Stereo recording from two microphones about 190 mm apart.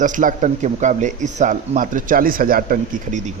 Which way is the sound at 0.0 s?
40° right (ahead or behind).